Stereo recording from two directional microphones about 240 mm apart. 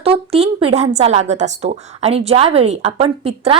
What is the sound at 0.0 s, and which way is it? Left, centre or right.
A woman's voice, right.